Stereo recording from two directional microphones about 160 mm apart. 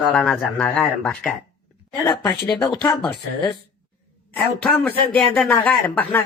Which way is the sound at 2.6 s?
25° left (ahead or behind).